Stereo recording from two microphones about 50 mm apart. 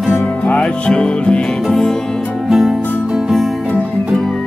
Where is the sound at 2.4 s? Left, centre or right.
Centre.